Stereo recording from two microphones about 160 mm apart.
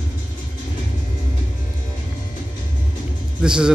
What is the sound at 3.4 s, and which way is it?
Speech, 5° right (ahead or behind).